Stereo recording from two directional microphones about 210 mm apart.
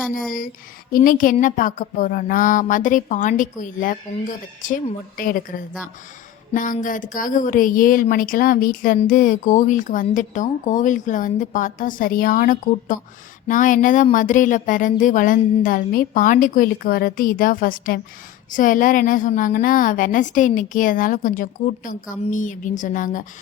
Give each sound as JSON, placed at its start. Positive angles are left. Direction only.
{"t": 0.1, "sound": "a woman's voice", "side_deg": 40}
{"t": 5.1, "sound": "a woman's voice", "side_deg": 40}
{"t": 6.5, "sound": "a woman's voice", "side_deg": 40}